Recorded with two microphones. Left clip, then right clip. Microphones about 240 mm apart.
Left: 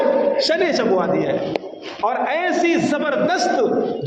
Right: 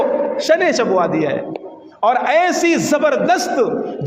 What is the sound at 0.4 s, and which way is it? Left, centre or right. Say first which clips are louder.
A man's voice: right 4 dB; right.